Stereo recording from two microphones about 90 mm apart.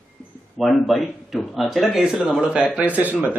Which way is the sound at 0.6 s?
Centre (ahead or behind).